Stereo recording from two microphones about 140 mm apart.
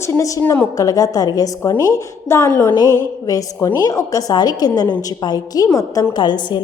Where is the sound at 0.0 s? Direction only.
20° left (ahead or behind).